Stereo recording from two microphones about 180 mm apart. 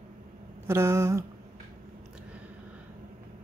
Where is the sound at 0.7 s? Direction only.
15° right (ahead or behind).